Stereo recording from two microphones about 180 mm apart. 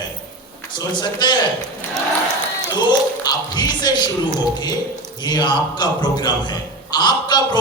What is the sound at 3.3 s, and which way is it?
A man's voice, 25° left (ahead or behind).